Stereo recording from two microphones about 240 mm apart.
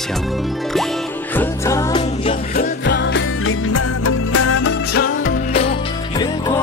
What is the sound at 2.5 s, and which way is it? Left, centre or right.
Music, left.